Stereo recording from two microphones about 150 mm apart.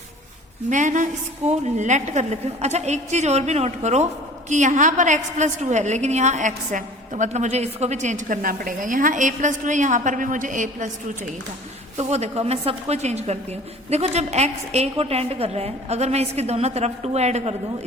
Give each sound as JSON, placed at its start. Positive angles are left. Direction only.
{"t": 0.7, "sound": "a woman's voice", "side_deg": -55}